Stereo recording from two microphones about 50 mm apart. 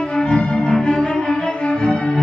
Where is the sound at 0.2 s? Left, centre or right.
Centre.